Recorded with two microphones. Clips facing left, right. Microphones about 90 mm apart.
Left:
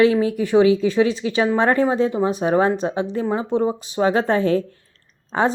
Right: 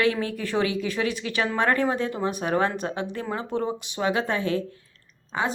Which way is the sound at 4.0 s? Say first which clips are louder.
Left 7 dB; 35° left (ahead or behind).